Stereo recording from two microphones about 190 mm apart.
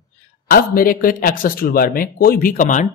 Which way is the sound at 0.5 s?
50° left (ahead or behind).